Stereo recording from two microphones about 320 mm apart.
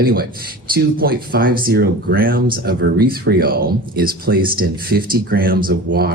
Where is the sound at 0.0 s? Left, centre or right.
Right.